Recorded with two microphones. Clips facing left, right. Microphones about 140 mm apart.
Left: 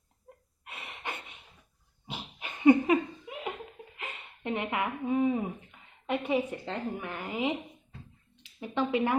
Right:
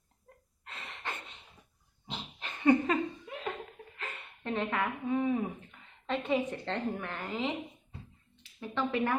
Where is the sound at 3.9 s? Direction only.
15° left (ahead or behind).